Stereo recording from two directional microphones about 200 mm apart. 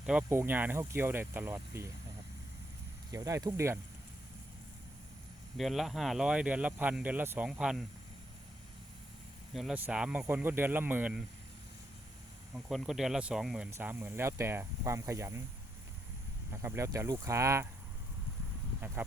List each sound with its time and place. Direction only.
0.0 s speech: 5° right (ahead or behind)
3.1 s speech: 15° right (ahead or behind)
5.5 s speech: centre (ahead or behind)
9.5 s speech: centre (ahead or behind)
12.5 s speech: centre (ahead or behind)
16.6 s speech: 15° right (ahead or behind)
19.0 s speech: 10° right (ahead or behind)